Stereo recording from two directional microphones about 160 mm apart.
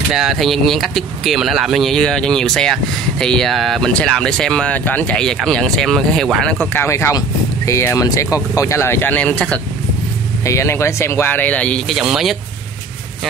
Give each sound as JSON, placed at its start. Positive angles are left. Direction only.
{"t": 0.1, "sound": "speech", "side_deg": 0}
{"t": 6.6, "sound": "speech", "side_deg": 15}
{"t": 12.0, "sound": "speech", "side_deg": -5}